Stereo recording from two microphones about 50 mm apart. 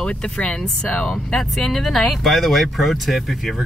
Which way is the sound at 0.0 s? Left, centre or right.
Centre.